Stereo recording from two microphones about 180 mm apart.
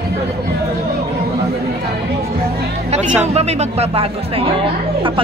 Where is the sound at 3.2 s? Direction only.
35° right (ahead or behind).